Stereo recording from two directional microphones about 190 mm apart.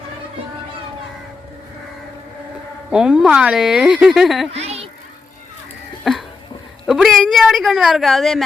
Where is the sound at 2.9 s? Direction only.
5° right (ahead or behind).